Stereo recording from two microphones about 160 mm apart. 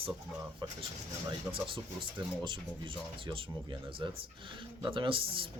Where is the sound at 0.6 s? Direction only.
30° right (ahead or behind).